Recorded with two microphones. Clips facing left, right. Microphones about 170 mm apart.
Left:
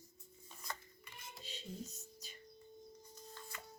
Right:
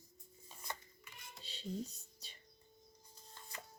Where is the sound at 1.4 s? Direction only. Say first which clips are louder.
Right 5 dB; 35° right (ahead or behind).